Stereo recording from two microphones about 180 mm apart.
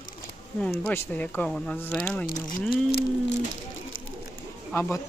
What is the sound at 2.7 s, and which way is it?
Speech, 60° left (ahead or behind).